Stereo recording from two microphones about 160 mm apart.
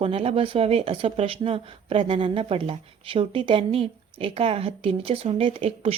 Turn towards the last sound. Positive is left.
turn(degrees=-35)  # may be behind; listen again after turning